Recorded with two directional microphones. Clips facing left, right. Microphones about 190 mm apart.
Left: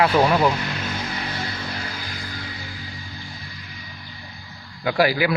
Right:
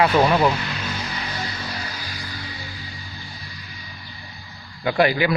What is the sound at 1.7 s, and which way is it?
Music, 55° left (ahead or behind).